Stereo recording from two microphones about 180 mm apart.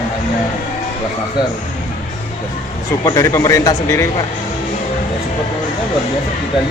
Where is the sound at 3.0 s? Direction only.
15° left (ahead or behind).